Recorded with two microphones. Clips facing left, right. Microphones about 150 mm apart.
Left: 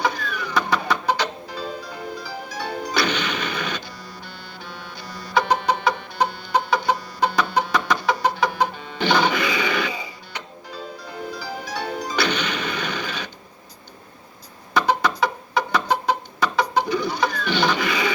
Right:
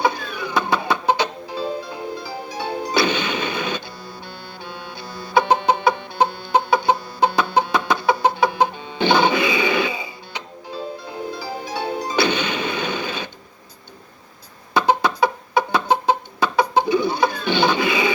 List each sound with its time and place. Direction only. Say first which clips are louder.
0.0 s music: right 3 dB; 25° right (ahead or behind)
11.4 s music: right 3 dB; 25° right (ahead or behind)
14.7 s chicken: right 2 dB; 25° right (ahead or behind)